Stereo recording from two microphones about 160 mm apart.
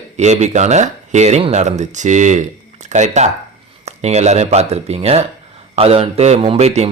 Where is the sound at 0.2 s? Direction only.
45° right (ahead or behind).